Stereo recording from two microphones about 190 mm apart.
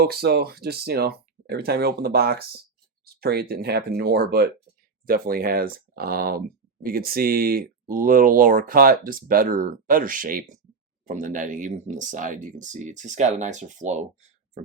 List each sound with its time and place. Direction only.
0.0 s speech: 55° right (ahead or behind); by 14.6 s 35° right (ahead or behind)